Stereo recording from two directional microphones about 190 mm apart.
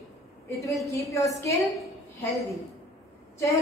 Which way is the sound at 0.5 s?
15° left (ahead or behind).